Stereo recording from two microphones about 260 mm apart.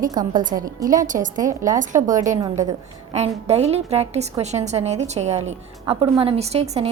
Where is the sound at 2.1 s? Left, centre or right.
Right.